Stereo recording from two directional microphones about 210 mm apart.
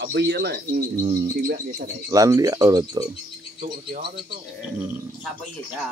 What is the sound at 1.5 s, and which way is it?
Speech, 40° right (ahead or behind).